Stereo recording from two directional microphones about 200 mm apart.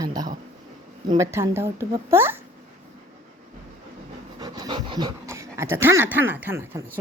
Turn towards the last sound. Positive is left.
turn(degrees=-10)  # may be behind; listen again after turning